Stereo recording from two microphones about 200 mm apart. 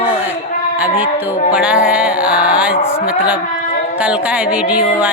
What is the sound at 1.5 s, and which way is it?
Music, 5° right (ahead or behind).